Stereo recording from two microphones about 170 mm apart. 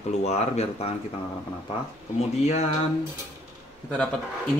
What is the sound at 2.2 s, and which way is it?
Speech, 40° left (ahead or behind).